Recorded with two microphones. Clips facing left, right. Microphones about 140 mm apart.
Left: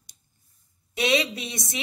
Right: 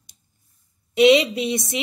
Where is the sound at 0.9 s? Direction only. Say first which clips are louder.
Right 10 dB; 20° right (ahead or behind).